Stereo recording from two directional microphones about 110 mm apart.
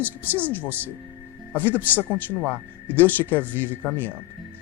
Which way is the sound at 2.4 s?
15° left (ahead or behind).